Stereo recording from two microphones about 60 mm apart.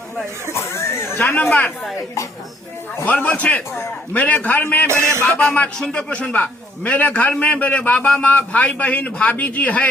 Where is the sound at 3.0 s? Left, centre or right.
Left.